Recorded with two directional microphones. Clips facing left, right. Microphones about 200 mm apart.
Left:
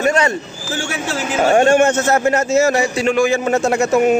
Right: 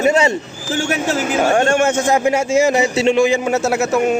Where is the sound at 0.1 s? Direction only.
25° right (ahead or behind).